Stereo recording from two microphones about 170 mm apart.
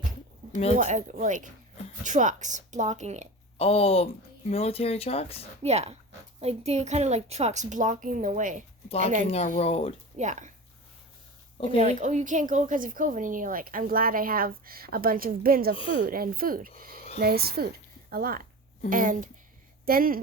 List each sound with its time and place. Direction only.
0.8 s speech: 45° right (ahead or behind)
3.6 s speech: 35° left (ahead or behind)
5.6 s a woman's voice: 40° right (ahead or behind)
9.2 s speech: 40° left (ahead or behind)
10.2 s speech: 45° right (ahead or behind)
11.5 s speech: 35° left (ahead or behind)
11.8 s a woman's voice: 45° right (ahead or behind)